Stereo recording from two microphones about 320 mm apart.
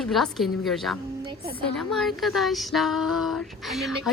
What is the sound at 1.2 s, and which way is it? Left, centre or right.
Speech, centre.